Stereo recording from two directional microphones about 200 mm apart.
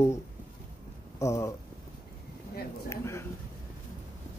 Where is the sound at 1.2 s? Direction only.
15° left (ahead or behind).